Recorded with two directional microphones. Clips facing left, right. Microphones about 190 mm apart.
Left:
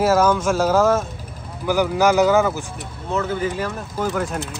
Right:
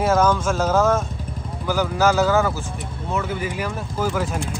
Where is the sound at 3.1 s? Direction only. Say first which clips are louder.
Left 3 dB; 10° right (ahead or behind).